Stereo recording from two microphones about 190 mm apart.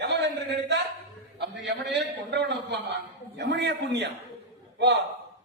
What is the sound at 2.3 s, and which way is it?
A man's voice, 65° right (ahead or behind).